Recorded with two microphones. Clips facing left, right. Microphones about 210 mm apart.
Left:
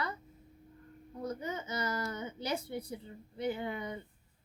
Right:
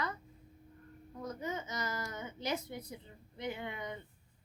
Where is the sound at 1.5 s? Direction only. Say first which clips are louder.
Left 3 dB; 30° left (ahead or behind).